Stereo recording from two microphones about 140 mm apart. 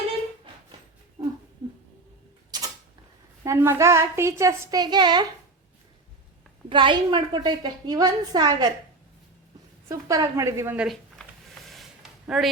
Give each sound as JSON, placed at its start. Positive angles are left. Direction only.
{"t": 1.2, "sound": "a sound", "side_deg": -30}
{"t": 2.5, "sound": "creak", "side_deg": -30}
{"t": 3.4, "sound": "a woman's voice", "side_deg": -20}
{"t": 6.7, "sound": "a woman's voice", "side_deg": -35}
{"t": 9.9, "sound": "a woman's voice", "side_deg": -25}
{"t": 10.8, "sound": "a sound", "side_deg": 0}